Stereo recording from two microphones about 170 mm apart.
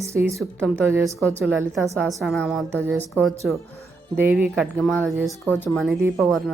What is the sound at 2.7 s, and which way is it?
Music, 10° right (ahead or behind).